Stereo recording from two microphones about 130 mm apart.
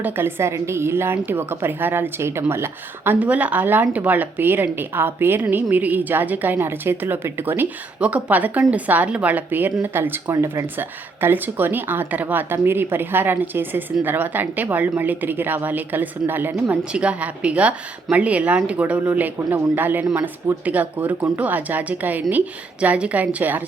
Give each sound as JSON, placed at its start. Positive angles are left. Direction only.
{"t": 0.0, "sound": "a woman's voice", "side_deg": -15}